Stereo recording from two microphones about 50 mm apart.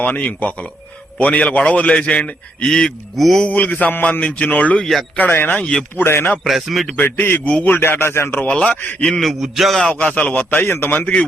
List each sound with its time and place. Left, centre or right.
0.0 s a man's voice: left
3.2 s a man's voice: centre
3.5 s speech: left
4.8 s a man's voice: centre
5.3 s speech: left
6.4 s a man's voice: centre
6.9 s speech: left
8.4 s a man's voice: left
9.0 s a man's voice: centre
9.2 s a man's voice: centre
9.9 s a man's voice: left